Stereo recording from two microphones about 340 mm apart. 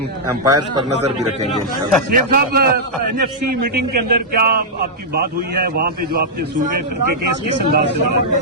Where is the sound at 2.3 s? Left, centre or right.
Right.